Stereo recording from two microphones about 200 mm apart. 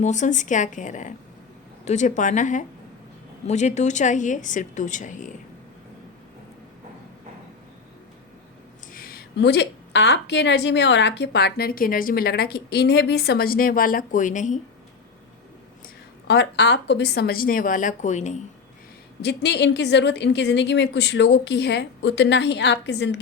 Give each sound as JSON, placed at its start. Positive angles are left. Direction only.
{"t": 0.0, "sound": "speech", "side_deg": 35}
{"t": 8.9, "sound": "a woman's voice", "side_deg": 45}
{"t": 16.2, "sound": "a woman's voice", "side_deg": 60}
{"t": 19.2, "sound": "a woman's voice", "side_deg": 60}